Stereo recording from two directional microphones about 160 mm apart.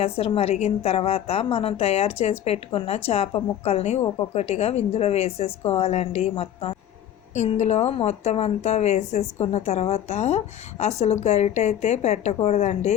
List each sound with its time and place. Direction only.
0.3 s a woman's voice: 40° left (ahead or behind)